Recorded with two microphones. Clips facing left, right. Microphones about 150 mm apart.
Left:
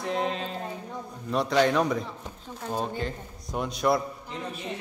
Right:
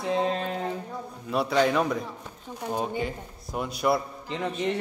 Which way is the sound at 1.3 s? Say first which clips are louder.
Even; 5° right (ahead or behind).